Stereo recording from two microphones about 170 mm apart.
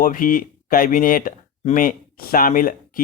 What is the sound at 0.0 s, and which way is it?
Speech, 55° left (ahead or behind).